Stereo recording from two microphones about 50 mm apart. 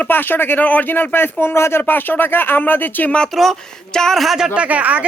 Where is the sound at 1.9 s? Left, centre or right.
Left.